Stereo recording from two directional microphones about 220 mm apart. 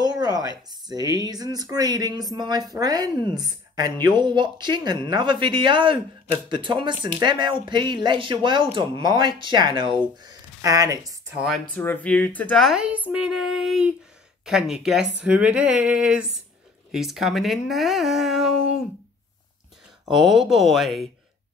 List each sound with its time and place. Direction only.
0.0 s a woman's voice: 20° right (ahead or behind)
11.3 s speech: centre (ahead or behind)
20.1 s speech: centre (ahead or behind)